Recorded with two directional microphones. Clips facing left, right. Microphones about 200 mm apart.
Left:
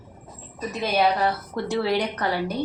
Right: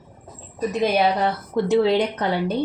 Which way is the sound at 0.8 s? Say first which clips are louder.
Right 2 dB; 20° right (ahead or behind).